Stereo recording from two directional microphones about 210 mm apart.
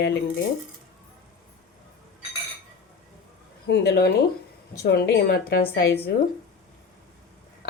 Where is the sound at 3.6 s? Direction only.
55° left (ahead or behind).